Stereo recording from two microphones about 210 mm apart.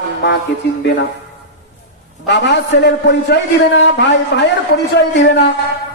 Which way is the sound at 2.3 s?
55° left (ahead or behind).